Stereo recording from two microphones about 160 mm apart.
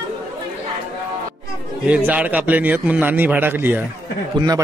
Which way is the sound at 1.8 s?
10° right (ahead or behind).